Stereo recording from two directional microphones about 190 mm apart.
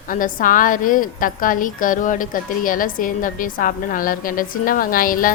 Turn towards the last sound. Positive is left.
turn(degrees=45)  # may be behind; listen again after turning